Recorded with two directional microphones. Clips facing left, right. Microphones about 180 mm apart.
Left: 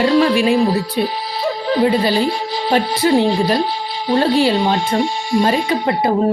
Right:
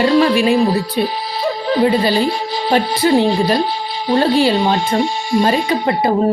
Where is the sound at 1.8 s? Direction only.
35° right (ahead or behind).